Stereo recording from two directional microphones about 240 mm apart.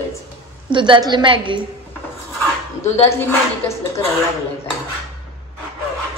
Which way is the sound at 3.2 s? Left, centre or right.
Centre.